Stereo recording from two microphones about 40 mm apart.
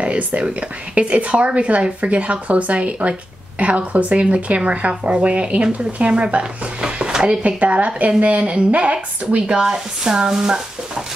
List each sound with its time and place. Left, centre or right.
0.4 s a woman's voice: right
7.1 s a sound: centre
7.4 s a woman's voice: right
9.5 s speech: centre